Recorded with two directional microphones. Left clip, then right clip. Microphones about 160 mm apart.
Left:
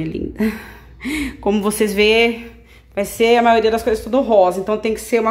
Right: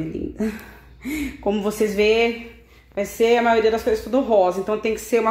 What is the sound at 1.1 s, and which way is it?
Speech, 30° left (ahead or behind).